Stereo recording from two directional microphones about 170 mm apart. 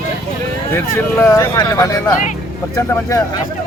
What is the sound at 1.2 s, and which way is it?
Speech, 15° left (ahead or behind).